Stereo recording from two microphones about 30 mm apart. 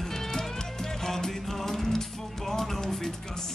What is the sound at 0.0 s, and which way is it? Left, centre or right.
Music, centre.